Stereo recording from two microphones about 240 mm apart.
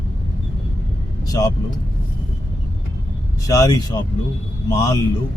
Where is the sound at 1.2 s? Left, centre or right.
Centre.